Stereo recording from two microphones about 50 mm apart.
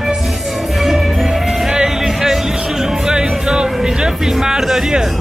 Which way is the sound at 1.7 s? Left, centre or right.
Centre.